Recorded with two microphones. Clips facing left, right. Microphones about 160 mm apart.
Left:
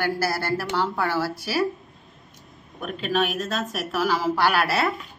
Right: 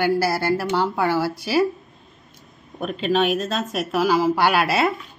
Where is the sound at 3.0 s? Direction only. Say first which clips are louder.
Right 5 dB; 25° right (ahead or behind).